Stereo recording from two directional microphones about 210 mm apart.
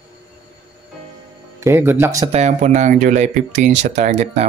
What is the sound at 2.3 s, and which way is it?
Speech, 35° right (ahead or behind).